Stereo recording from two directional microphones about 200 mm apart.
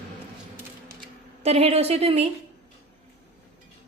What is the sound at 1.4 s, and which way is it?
Speech, 30° right (ahead or behind).